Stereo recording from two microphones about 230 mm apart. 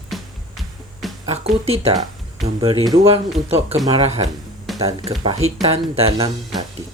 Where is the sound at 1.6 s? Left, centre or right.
Right.